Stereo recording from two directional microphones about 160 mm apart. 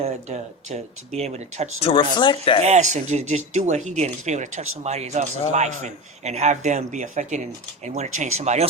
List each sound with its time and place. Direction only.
0.0 s speech: 45° right (ahead or behind)
1.8 s speech: 30° left (ahead or behind)
2.6 s speech: 45° right (ahead or behind)